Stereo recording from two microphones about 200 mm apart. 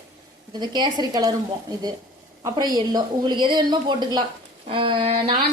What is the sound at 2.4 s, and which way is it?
Speech, 20° right (ahead or behind).